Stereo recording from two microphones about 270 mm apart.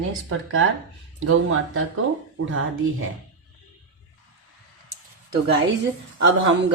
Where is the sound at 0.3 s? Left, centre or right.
Right.